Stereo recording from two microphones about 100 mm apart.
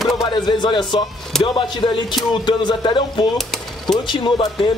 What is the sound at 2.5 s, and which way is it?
Speech, 50° left (ahead or behind).